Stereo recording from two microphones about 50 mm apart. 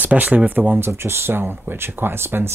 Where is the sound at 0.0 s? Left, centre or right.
Right.